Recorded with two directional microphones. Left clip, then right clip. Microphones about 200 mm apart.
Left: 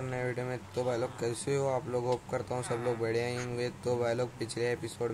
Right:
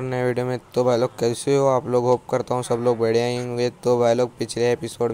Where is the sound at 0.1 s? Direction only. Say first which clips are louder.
Right 13 dB; 35° right (ahead or behind).